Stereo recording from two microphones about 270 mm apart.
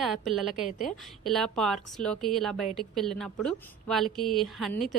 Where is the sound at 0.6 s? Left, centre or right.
Left.